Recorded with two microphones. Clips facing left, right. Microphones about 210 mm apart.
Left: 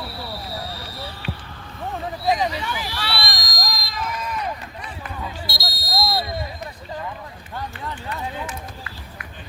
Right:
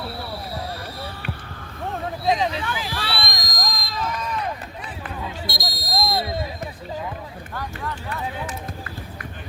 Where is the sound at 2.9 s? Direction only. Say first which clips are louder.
Even; 50° right (ahead or behind).